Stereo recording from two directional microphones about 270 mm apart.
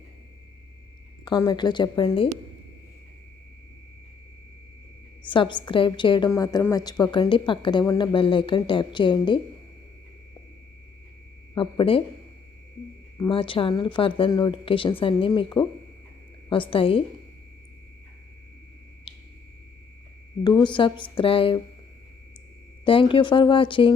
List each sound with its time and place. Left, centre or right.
1.2 s a woman's voice: centre
5.2 s a woman's voice: centre
11.5 s speech: centre
13.1 s speech: centre
20.4 s a woman's voice: centre
22.8 s speech: centre